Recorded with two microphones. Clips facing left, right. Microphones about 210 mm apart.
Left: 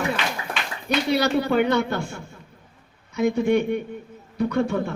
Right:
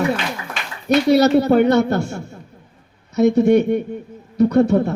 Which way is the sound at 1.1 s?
45° right (ahead or behind).